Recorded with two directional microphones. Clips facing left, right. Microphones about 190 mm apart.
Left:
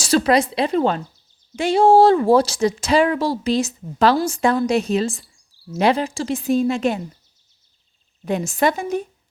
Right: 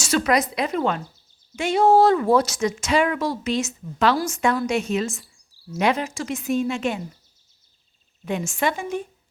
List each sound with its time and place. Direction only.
0.0 s speech: 30° left (ahead or behind)
8.2 s speech: 35° left (ahead or behind)